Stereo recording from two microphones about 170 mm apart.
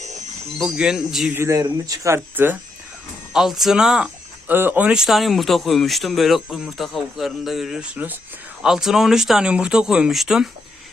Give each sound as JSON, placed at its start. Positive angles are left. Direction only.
{"t": 0.6, "sound": "speech", "side_deg": -5}
{"t": 3.3, "sound": "speech", "side_deg": 0}